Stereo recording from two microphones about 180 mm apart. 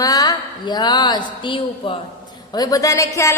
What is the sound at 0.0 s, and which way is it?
A woman's voice, 20° left (ahead or behind).